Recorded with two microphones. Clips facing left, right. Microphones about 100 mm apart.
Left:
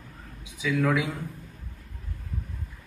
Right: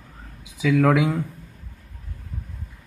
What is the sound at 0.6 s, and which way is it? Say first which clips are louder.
Speech: right 7 dB; 90° right.